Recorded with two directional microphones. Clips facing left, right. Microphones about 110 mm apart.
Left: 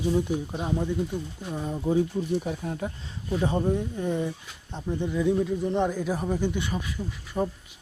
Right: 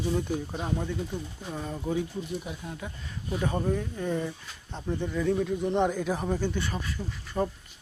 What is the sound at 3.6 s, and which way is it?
Speech, 20° left (ahead or behind).